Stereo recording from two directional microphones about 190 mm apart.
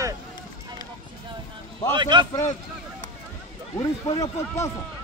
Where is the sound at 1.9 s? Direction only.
25° right (ahead or behind).